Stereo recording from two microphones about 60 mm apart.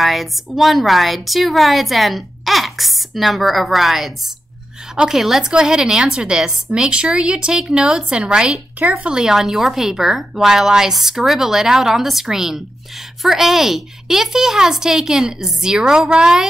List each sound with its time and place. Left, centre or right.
0.0 s a woman's voice: centre; by 9.1 s right
9.1 s a woman's voice: centre